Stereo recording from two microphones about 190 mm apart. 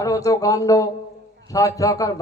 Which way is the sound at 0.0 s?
20° left (ahead or behind).